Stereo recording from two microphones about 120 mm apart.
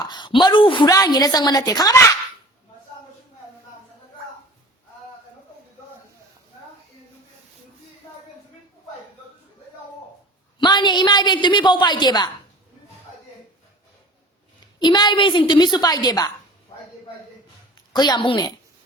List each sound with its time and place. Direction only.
0.0 s a woman's voice: 40° left (ahead or behind)
0.9 s a woman's voice: 30° left (ahead or behind)
10.6 s a woman's voice: 40° left (ahead or behind)
14.8 s a woman's voice: 35° left (ahead or behind)
17.9 s a woman's voice: 40° left (ahead or behind)